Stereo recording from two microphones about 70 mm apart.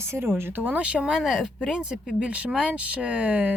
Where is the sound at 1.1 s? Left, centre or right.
Centre.